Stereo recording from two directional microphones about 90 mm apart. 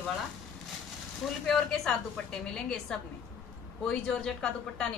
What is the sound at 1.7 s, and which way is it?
A woman's voice, 5° left (ahead or behind).